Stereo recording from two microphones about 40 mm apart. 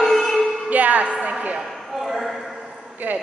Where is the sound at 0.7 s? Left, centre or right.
Right.